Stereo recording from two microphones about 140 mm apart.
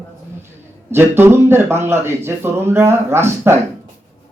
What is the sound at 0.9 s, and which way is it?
Speech, 15° right (ahead or behind).